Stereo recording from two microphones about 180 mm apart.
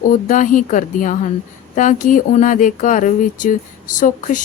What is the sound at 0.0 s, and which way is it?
Speech, 45° left (ahead or behind).